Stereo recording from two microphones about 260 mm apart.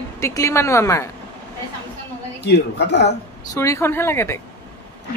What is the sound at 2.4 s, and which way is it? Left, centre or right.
Speech, left.